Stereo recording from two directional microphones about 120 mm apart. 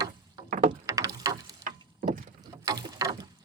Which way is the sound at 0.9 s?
25° right (ahead or behind).